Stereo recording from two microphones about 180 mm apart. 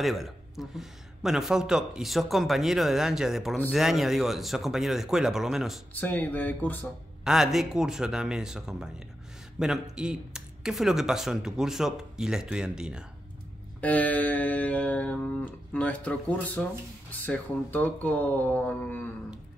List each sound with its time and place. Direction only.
0.0 s a man's voice: centre (ahead or behind)
6.0 s music: 10° left (ahead or behind)
7.2 s a man's voice: centre (ahead or behind)
13.7 s music: 10° left (ahead or behind)